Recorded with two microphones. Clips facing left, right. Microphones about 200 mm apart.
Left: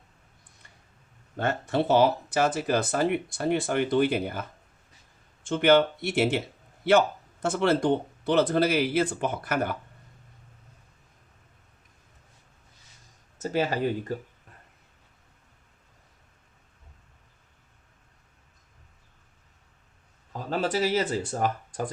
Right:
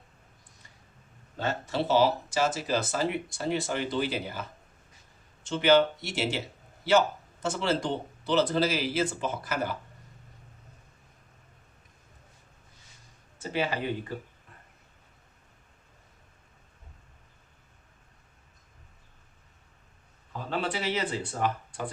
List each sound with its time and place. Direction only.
1.4 s speech: 55° left (ahead or behind)
7.4 s speech: 55° left (ahead or behind)
13.4 s speech: 40° left (ahead or behind)
20.5 s speech: 40° left (ahead or behind)